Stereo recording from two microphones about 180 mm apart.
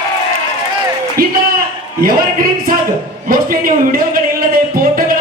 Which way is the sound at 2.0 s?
55° right (ahead or behind).